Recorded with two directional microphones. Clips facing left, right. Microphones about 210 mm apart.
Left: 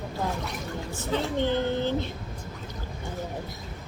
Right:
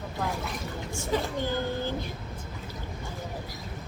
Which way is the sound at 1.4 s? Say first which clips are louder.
Left 4 dB; 25° left (ahead or behind).